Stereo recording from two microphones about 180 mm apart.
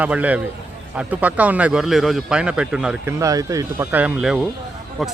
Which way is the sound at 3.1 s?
15° right (ahead or behind).